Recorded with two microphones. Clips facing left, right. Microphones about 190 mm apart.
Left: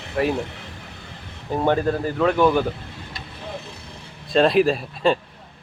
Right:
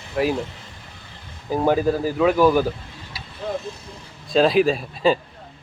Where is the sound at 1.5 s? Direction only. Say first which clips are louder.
Right 1 dB; 5° right (ahead or behind).